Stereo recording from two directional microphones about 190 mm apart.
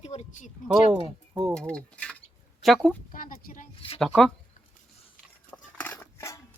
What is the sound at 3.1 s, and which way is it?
Speech, 45° left (ahead or behind).